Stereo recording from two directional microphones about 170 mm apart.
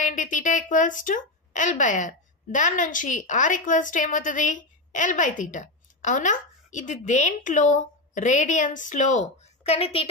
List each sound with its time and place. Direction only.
0.0 s a woman's voice: 50° left (ahead or behind)